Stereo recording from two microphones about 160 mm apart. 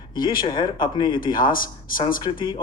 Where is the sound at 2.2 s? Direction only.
30° left (ahead or behind).